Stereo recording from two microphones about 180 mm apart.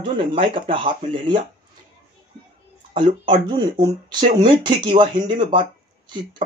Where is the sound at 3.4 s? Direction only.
25° right (ahead or behind).